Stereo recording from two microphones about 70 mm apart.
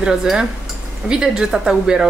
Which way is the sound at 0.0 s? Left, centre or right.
Centre.